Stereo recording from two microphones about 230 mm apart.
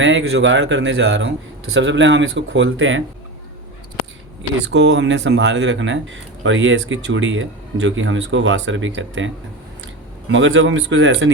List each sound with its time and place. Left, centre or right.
0.0 s speech: right
4.6 s speech: right
10.3 s speech: right